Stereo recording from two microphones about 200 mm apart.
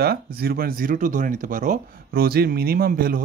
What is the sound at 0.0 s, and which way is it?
Speech, 50° right (ahead or behind).